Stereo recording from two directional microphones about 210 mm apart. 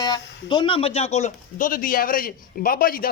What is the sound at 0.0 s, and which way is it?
A man's voice, 20° left (ahead or behind).